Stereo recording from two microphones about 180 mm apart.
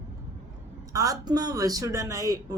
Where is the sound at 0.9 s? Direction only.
20° right (ahead or behind).